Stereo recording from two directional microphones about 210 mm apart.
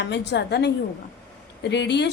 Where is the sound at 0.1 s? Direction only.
55° left (ahead or behind).